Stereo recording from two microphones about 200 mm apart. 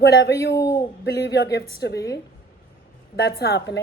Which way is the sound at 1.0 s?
60° left (ahead or behind).